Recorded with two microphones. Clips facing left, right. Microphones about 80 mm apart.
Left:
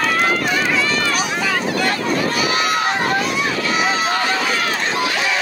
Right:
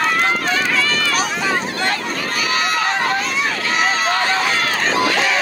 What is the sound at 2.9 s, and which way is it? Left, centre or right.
Run, left.